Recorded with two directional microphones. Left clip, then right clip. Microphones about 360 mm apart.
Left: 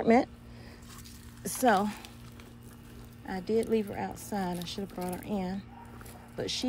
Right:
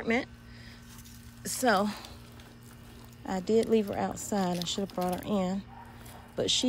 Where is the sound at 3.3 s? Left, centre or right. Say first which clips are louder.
Right 3 dB; centre.